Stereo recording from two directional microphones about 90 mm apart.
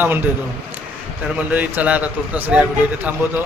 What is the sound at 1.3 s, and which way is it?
A man's voice, 15° right (ahead or behind).